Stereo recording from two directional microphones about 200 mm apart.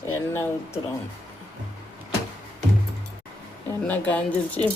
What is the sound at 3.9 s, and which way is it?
Speech, 5° left (ahead or behind).